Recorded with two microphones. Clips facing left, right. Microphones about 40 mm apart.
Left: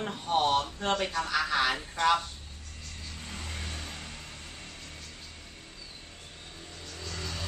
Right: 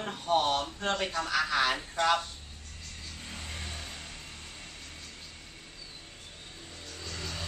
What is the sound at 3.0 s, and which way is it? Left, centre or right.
Vehicle, centre.